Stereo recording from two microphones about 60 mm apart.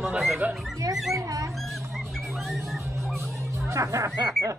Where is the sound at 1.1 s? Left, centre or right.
Right.